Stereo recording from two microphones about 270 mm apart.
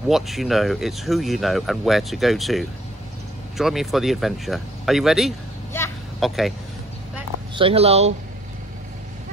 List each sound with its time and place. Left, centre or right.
0.1 s speech: centre
5.7 s vehicle: centre
7.5 s speech: right